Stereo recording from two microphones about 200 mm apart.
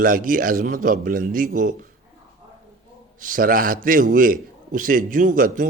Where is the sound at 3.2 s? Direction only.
45° right (ahead or behind).